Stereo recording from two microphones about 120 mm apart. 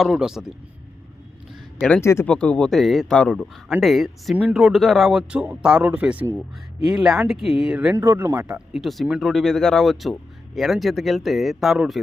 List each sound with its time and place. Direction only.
0.0 s speech: 5° right (ahead or behind)
2.0 s speech: 20° left (ahead or behind)
2.2 s speech: 10° left (ahead or behind); by 7.9 s 10° right (ahead or behind)
7.9 s speech: 20° right (ahead or behind)
8.4 s speech: 5° right (ahead or behind)